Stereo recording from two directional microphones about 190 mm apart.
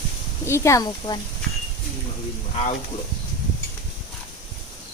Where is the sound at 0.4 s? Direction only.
15° left (ahead or behind).